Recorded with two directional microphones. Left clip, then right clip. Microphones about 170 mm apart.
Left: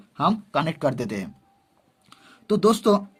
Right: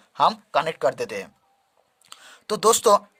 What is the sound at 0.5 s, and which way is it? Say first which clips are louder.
Speech: right 2 dB; 20° right (ahead or behind).